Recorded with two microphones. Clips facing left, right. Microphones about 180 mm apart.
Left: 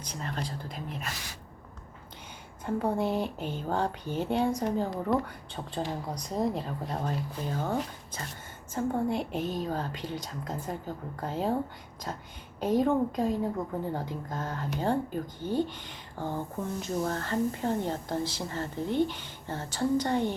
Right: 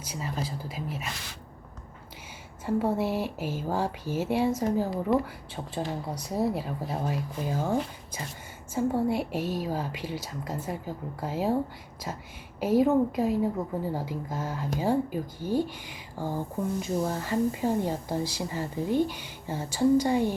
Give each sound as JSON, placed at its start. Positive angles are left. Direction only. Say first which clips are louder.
{"t": 0.0, "sound": "speech", "louder": "right 2 dB", "side_deg": -5}
{"t": 2.6, "sound": "a woman's voice", "louder": "right 2 dB", "side_deg": -5}